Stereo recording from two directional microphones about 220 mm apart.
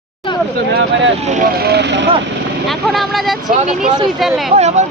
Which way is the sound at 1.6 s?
45° right (ahead or behind).